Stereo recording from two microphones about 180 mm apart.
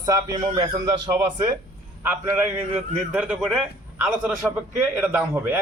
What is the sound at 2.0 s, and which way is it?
A man's voice, 15° right (ahead or behind).